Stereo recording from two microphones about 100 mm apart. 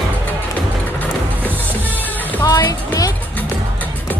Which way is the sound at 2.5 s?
40° left (ahead or behind).